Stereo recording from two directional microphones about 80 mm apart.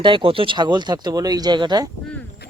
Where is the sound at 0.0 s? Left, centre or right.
Right.